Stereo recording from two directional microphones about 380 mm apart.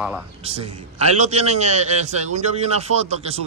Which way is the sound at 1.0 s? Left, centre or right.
Centre.